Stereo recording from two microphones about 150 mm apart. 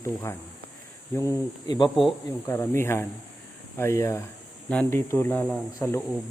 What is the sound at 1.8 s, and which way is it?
Speech, centre (ahead or behind).